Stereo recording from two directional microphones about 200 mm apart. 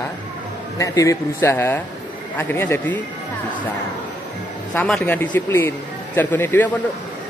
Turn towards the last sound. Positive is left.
turn(degrees=10)  # may be behind; listen again after turning